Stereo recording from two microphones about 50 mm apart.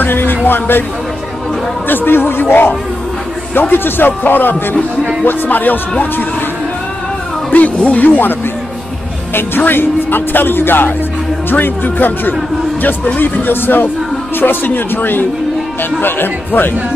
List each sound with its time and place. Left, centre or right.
0.0 s music: left
0.5 s speech: left
1.9 s speech: left
7.5 s speech: left